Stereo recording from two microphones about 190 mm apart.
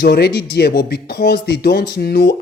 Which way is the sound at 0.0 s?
60° left (ahead or behind).